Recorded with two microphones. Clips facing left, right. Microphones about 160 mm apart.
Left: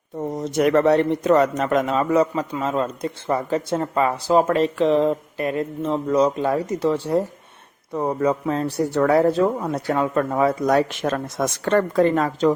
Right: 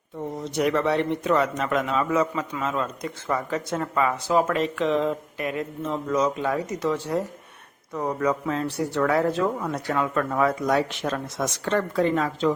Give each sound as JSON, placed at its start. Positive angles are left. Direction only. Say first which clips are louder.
{"t": 0.2, "sound": "speech", "louder": "left 5 dB", "side_deg": 45}
{"t": 10.7, "sound": "speech", "louder": "left 4 dB", "side_deg": 45}